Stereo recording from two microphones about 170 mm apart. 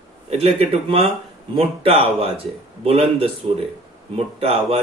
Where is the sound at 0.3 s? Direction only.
35° right (ahead or behind).